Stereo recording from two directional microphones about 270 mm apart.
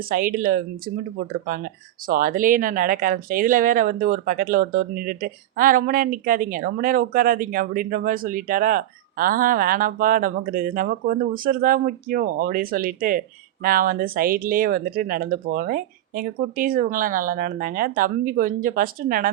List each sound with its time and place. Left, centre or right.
0.0 s speech: right